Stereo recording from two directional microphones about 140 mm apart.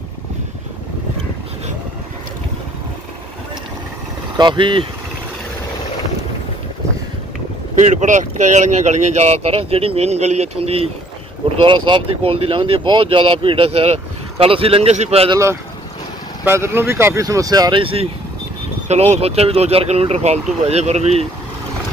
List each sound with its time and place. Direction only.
4.4 s speech: 35° right (ahead or behind)
7.7 s speech: 60° right (ahead or behind)
16.4 s speech: 15° right (ahead or behind); by 18.0 s 40° right (ahead or behind)
18.9 s speech: 50° right (ahead or behind)